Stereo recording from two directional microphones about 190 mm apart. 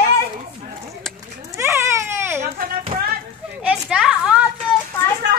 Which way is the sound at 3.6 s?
5° right (ahead or behind).